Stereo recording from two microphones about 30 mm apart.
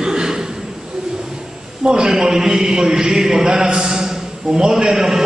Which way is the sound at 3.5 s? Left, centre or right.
Right.